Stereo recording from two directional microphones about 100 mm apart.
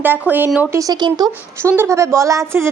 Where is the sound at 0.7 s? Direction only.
35° right (ahead or behind).